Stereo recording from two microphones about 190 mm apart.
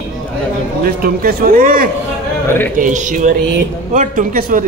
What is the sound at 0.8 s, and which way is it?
A man's voice, 50° right (ahead or behind).